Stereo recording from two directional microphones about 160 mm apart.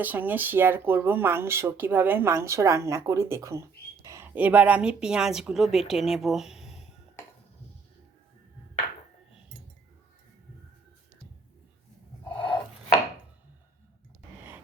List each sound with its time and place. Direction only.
0.0 s speech: 10° right (ahead or behind)
12.4 s chopping: 30° left (ahead or behind)